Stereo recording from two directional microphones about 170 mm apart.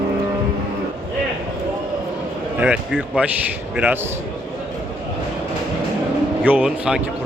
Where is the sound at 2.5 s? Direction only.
10° right (ahead or behind).